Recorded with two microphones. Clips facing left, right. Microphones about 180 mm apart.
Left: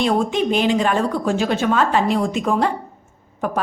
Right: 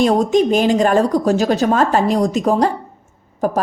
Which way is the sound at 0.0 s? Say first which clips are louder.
Right 5 dB; 40° right (ahead or behind).